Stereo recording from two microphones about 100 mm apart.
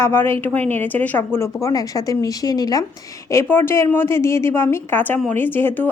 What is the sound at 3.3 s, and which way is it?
A woman's voice, 25° left (ahead or behind).